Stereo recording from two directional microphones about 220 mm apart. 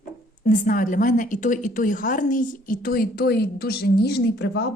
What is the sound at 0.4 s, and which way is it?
A woman's voice, 35° left (ahead or behind).